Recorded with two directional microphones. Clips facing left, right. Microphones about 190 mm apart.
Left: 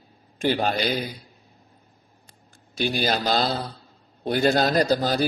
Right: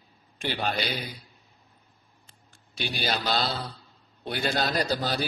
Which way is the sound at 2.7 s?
45° left (ahead or behind).